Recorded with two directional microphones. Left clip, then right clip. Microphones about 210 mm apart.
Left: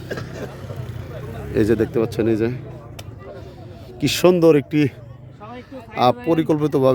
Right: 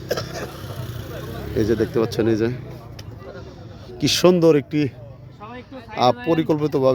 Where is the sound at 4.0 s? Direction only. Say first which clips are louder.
Left 1 dB; centre (ahead or behind).